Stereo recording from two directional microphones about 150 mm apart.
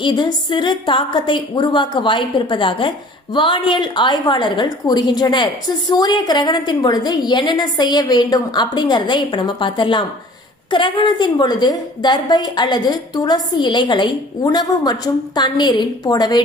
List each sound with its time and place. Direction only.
0.0 s a woman's voice: 30° left (ahead or behind)